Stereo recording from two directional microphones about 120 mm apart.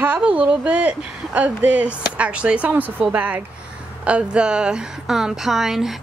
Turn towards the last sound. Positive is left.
turn(degrees=0)  # may be behind; listen again after turning